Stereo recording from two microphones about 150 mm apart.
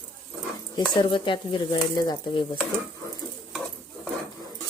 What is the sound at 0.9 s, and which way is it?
Speech, 35° left (ahead or behind).